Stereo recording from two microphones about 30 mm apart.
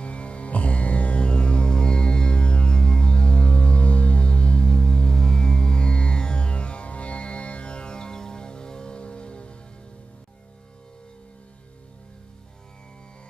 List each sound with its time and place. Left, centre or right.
0.0 s music: left